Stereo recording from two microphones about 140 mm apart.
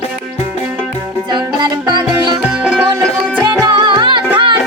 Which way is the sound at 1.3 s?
30° right (ahead or behind).